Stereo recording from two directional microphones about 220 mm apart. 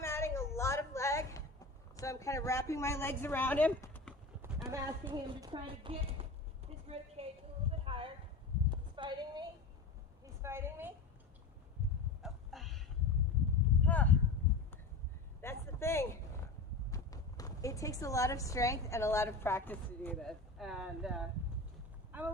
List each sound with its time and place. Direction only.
0.0 s a sound: 10° left (ahead or behind)
2.0 s speech: 15° left (ahead or behind)
4.4 s speech: 10° right (ahead or behind)
5.1 s a woman's voice: 20° right (ahead or behind)
7.9 s a sound: 25° right (ahead or behind)
10.4 s a woman's voice: 10° right (ahead or behind)
12.2 s a sound: centre (ahead or behind)
13.8 s speech: 5° left (ahead or behind)
15.4 s vehicle: 10° left (ahead or behind)
16.9 s speech: 15° left (ahead or behind); by 21.2 s centre (ahead or behind)